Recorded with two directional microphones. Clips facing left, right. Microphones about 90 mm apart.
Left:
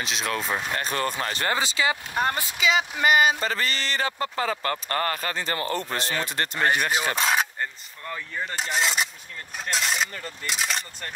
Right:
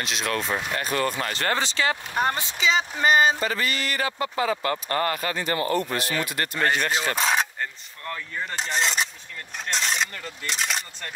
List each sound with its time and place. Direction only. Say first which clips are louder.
0.0 s speech: right 1 dB; centre (ahead or behind)
2.1 s speech: right 1 dB; 20° right (ahead or behind)
3.4 s speech: right 1 dB; 35° left (ahead or behind)
6.6 s speech: even; 15° left (ahead or behind)